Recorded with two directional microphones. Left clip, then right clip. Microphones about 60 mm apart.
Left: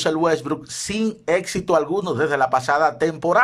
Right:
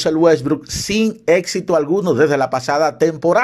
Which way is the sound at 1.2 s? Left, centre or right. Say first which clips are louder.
Right 6 dB; right.